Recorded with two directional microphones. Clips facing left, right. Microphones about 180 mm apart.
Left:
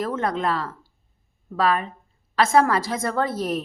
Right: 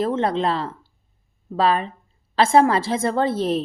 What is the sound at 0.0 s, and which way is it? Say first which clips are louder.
A woman's voice: right 4 dB; 25° right (ahead or behind).